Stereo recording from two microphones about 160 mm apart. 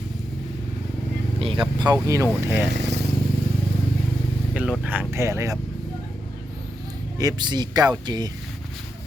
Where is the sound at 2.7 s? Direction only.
90° right.